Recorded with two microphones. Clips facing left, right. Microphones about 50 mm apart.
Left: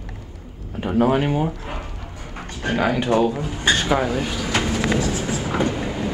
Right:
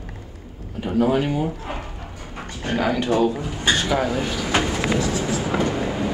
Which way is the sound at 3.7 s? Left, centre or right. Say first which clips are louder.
Left 1 dB; left.